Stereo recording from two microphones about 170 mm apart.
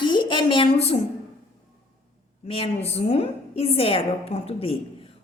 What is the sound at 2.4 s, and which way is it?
A woman's voice, 35° left (ahead or behind).